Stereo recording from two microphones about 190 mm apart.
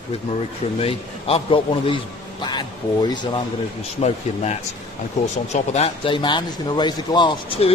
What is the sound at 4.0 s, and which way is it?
A man's voice, 35° left (ahead or behind).